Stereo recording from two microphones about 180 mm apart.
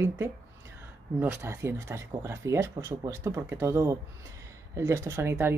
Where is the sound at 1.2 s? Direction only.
10° right (ahead or behind).